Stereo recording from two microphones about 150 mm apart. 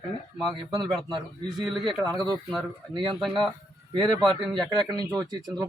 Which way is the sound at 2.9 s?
30° right (ahead or behind).